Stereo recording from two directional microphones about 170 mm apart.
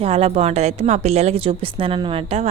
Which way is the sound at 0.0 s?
35° right (ahead or behind).